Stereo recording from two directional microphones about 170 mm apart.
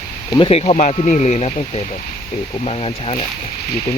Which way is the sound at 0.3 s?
30° left (ahead or behind).